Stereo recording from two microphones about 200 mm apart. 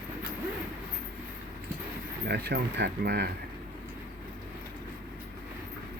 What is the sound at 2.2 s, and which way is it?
Speech, 55° right (ahead or behind).